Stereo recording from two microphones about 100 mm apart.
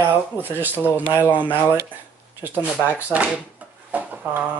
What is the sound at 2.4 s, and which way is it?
Speech, 20° right (ahead or behind).